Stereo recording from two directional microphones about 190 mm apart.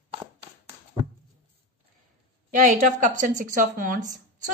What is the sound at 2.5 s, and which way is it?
A woman's voice, 45° right (ahead or behind).